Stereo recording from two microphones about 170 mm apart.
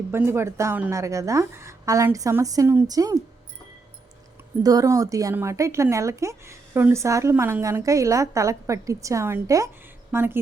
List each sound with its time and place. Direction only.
0.1 s a woman's voice: 15° right (ahead or behind)
4.6 s a woman's voice: 20° right (ahead or behind)